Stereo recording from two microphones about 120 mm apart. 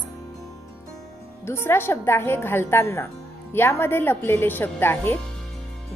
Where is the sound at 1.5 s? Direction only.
20° left (ahead or behind).